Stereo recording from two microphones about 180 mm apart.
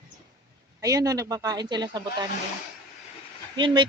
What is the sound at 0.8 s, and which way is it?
Speech, 20° right (ahead or behind).